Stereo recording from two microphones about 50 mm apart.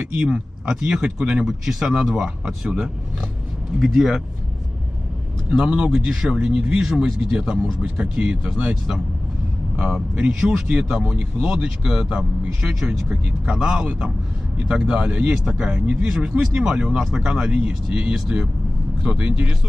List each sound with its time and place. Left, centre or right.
0.7 s speech: centre
3.8 s speech: centre
5.5 s speech: centre
10.1 s speech: right
13.5 s speech: right